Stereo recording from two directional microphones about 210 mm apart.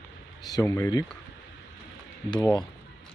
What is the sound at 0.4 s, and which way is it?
Speech, 15° left (ahead or behind).